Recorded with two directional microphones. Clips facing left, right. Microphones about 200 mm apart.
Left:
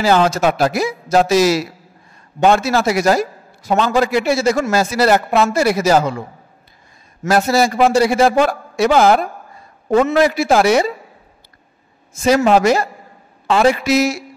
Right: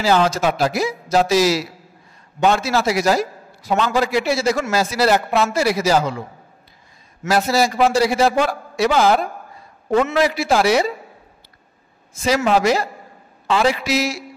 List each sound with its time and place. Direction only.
0.0 s a man's voice: 50° left (ahead or behind)
7.2 s a man's voice: 50° left (ahead or behind)
12.2 s a man's voice: 45° left (ahead or behind)